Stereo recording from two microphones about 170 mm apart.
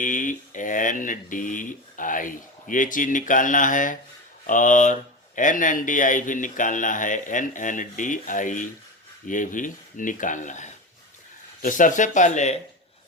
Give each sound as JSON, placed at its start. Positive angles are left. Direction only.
{"t": 0.0, "sound": "speech", "side_deg": 50}